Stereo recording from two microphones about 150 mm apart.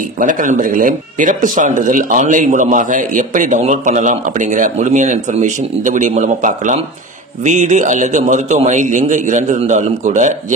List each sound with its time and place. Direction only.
0.2 s a man's voice: 60° right (ahead or behind)